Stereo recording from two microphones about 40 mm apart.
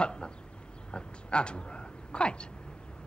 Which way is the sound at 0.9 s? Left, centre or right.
Left.